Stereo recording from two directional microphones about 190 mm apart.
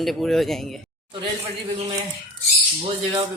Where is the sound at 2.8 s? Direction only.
25° right (ahead or behind).